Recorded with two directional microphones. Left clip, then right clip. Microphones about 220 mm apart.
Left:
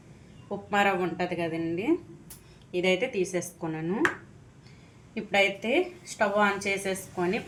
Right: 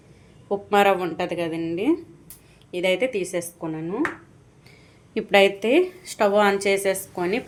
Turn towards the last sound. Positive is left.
turn(degrees=-45)  # may be behind; listen again after turning